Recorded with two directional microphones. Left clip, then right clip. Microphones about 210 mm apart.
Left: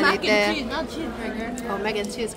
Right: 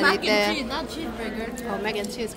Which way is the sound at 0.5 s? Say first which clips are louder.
Left 1 dB; 20° right (ahead or behind).